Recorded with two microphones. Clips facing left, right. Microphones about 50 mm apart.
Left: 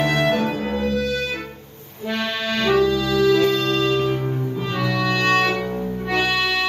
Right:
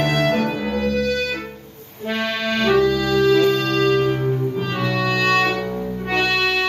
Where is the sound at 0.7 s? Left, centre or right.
Right.